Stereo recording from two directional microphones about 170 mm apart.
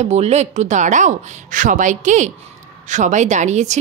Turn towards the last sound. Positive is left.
turn(degrees=-45)  # may be behind; listen again after turning